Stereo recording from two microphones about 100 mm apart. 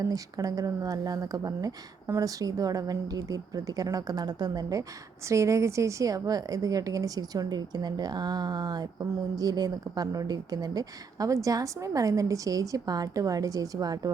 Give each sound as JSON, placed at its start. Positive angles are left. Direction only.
{"t": 0.0, "sound": "a woman's voice", "side_deg": -35}